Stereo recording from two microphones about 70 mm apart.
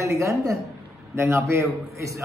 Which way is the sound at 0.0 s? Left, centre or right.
Right.